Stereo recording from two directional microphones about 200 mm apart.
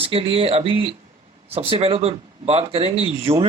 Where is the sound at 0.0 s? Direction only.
30° right (ahead or behind).